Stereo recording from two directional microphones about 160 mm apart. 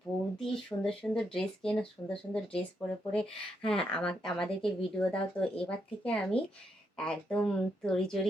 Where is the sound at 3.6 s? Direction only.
5° left (ahead or behind).